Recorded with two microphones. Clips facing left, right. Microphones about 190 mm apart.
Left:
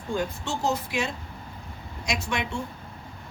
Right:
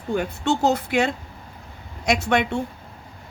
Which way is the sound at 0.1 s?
65° right (ahead or behind).